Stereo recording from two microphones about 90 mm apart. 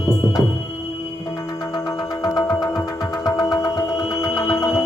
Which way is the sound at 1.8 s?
45° left (ahead or behind).